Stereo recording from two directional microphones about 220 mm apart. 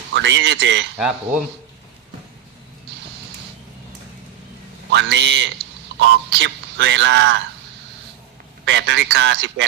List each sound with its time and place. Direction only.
0.1 s speech: 55° right (ahead or behind)
0.9 s speech: 5° right (ahead or behind)
4.9 s a man's voice: 55° right (ahead or behind)
8.6 s a man's voice: 55° right (ahead or behind)